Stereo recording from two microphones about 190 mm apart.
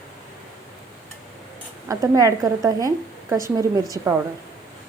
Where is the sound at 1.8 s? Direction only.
15° right (ahead or behind).